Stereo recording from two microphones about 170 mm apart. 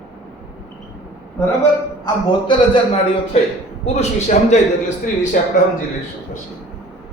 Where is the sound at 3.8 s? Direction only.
40° left (ahead or behind).